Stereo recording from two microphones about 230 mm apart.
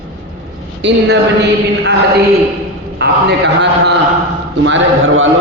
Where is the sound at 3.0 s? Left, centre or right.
Right.